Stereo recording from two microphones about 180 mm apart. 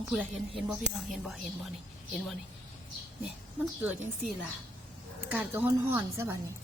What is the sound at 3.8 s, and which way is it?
A woman's voice, 10° right (ahead or behind).